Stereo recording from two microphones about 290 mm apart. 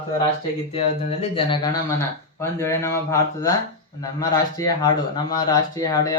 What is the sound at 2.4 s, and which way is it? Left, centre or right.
Speech, centre.